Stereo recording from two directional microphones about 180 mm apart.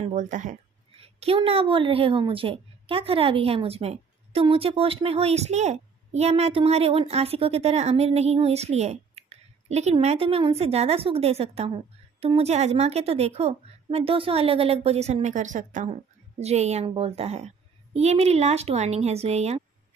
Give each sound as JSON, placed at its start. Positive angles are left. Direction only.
{"t": 0.0, "sound": "speech", "side_deg": -45}
{"t": 0.9, "sound": "a woman's voice", "side_deg": -30}